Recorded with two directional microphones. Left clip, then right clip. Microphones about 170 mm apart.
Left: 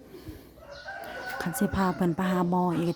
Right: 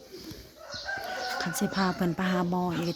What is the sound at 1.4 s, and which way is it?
Speech, 35° left (ahead or behind).